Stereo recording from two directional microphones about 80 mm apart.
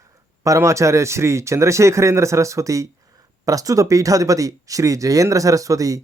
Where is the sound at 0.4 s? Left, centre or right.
Right.